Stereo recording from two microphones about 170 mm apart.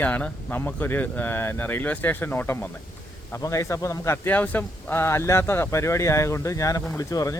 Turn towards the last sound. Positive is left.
turn(degrees=20)  # may be behind; listen again after turning